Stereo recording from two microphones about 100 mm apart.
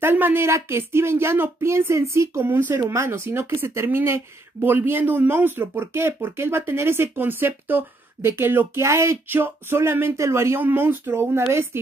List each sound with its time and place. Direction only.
0.0 s speech: 20° right (ahead or behind)